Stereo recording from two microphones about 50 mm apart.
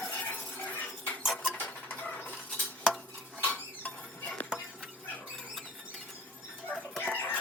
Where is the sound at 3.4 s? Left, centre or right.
Left.